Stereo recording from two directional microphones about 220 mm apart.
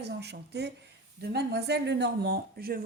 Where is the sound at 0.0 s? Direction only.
50° right (ahead or behind).